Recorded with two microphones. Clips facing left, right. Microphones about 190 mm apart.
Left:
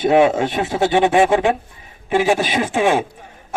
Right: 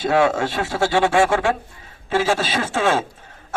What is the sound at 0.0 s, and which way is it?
A man's voice, 20° left (ahead or behind).